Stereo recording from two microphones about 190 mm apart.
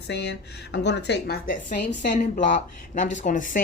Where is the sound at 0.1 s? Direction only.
60° left (ahead or behind).